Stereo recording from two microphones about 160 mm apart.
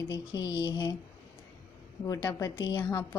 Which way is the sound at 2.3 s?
20° left (ahead or behind).